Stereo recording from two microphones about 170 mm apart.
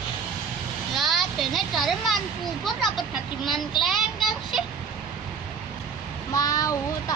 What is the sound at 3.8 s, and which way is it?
Child singing, centre (ahead or behind).